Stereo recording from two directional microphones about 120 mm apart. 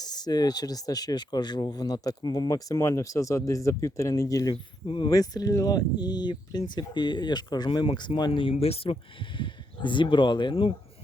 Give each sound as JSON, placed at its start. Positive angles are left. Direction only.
{"t": 0.0, "sound": "speech", "side_deg": 35}
{"t": 4.5, "sound": "speech", "side_deg": 45}
{"t": 5.0, "sound": "speech", "side_deg": 30}
{"t": 9.4, "sound": "speech", "side_deg": 40}